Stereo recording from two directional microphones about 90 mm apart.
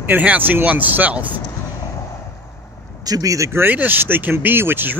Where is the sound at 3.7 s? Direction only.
20° right (ahead or behind).